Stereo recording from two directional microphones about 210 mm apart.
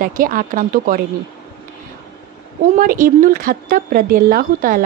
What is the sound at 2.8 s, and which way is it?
Speech, 40° right (ahead or behind).